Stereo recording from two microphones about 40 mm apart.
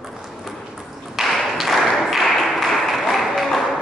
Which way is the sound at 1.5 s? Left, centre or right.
Centre.